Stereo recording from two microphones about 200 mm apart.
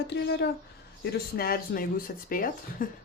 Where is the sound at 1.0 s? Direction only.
50° left (ahead or behind).